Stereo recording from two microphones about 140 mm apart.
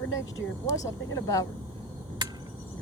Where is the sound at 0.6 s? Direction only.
25° left (ahead or behind).